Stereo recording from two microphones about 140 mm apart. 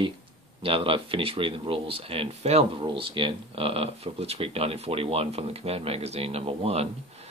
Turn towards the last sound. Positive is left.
turn(degrees=-45)  # may be behind; listen again after turning